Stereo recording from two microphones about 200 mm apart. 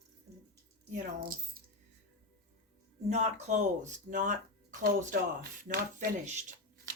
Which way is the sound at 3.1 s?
35° right (ahead or behind).